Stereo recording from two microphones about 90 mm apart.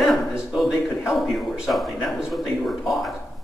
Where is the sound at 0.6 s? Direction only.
Centre (ahead or behind).